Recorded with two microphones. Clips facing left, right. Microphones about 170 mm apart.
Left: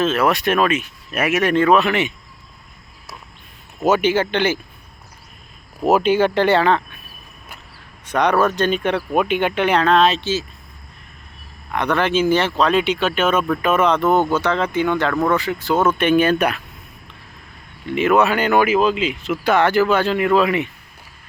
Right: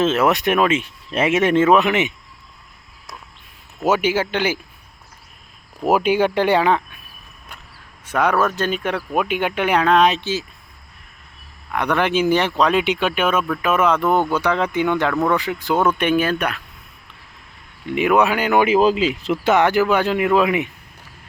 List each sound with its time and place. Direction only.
0.0 s speech: 20° right (ahead or behind)
3.8 s speech: 10° right (ahead or behind)
5.8 s speech: 10° right (ahead or behind)
8.0 s speech: 5° right (ahead or behind)
11.7 s speech: 10° right (ahead or behind)
16.2 s speech: 5° left (ahead or behind)
17.8 s speech: 15° right (ahead or behind)
18.6 s speech: 35° right (ahead or behind)
19.5 s speech: 15° right (ahead or behind)